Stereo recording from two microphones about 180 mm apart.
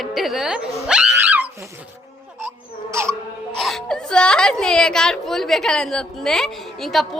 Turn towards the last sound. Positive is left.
turn(degrees=0)  # may be behind; listen again after turning